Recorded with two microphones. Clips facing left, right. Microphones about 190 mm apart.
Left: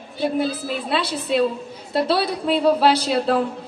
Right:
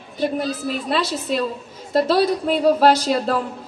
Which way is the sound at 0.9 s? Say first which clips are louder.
Left 1 dB; 45° right (ahead or behind).